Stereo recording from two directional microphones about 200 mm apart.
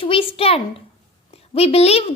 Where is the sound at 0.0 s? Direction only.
25° left (ahead or behind).